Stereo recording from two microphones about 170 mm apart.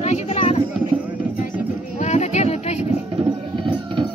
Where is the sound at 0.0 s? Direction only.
40° left (ahead or behind).